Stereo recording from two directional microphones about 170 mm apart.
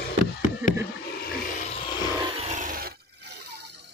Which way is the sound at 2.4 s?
45° right (ahead or behind).